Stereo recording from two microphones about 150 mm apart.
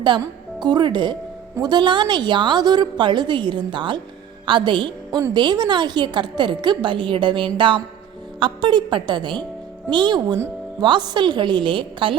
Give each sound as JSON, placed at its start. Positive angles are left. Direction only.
{"t": 0.6, "sound": "a woman's voice", "side_deg": -30}